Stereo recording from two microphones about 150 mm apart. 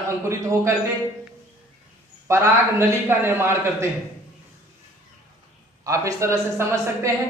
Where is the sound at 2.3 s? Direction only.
20° right (ahead or behind).